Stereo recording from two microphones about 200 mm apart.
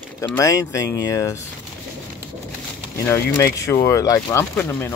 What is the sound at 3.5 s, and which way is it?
Speech, 15° left (ahead or behind).